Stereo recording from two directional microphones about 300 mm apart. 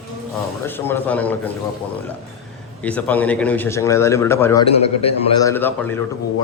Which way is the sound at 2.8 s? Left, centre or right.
Centre.